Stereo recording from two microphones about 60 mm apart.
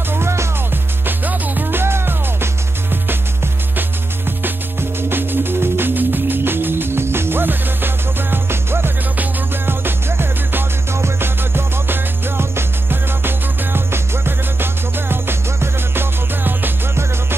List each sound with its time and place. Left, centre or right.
0.1 s music: right
1.0 s music: right
5.1 s music: right
13.7 s music: right